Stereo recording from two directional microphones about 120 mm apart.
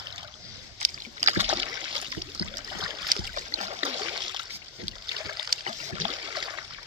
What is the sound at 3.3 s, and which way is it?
Boat, 90° right.